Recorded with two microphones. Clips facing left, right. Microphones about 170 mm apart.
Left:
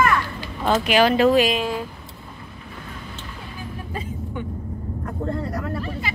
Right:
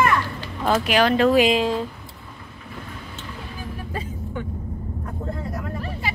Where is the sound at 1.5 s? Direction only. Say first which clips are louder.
Right 3 dB; 25° right (ahead or behind).